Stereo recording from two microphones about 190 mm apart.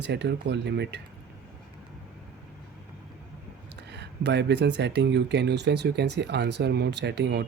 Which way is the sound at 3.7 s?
65° right (ahead or behind).